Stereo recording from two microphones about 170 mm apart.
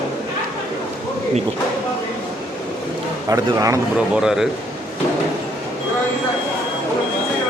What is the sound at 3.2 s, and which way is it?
Speech, 20° right (ahead or behind).